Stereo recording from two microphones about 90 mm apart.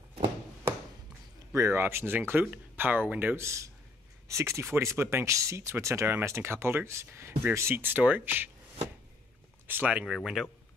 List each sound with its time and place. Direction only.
1.5 s speech: 30° right (ahead or behind)
3.4 s speech: 35° right (ahead or behind); by 10.0 s 20° right (ahead or behind)
10.0 s speech: 5° right (ahead or behind)